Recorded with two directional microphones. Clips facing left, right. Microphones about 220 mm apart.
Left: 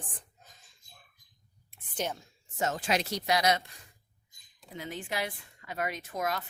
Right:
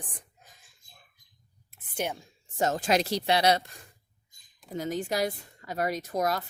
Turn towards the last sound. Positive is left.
turn(degrees=-40)  # may be behind; listen again after turning